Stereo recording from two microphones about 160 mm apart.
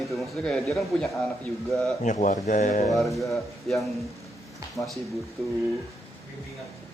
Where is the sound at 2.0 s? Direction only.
50° left (ahead or behind).